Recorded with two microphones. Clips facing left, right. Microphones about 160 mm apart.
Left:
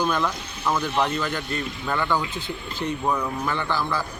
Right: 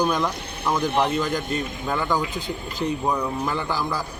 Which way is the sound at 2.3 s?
40° right (ahead or behind).